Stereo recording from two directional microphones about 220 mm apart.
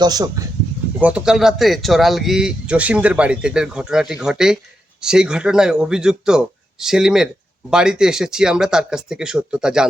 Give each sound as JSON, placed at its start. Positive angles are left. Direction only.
{"t": 0.0, "sound": "speech", "side_deg": -15}
{"t": 0.9, "sound": "speech", "side_deg": -5}